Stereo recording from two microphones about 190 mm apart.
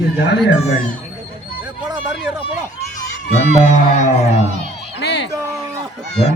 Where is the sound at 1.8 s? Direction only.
5° right (ahead or behind).